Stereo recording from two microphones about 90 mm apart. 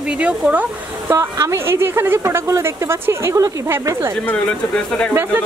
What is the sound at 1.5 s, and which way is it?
A woman's voice, 30° right (ahead or behind).